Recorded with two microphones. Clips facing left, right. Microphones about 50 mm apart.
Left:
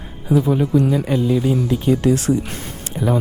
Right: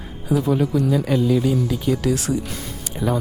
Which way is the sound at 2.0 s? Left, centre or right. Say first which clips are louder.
Left 4 dB; left.